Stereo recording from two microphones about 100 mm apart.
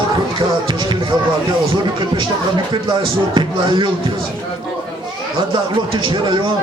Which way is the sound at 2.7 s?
50° right (ahead or behind).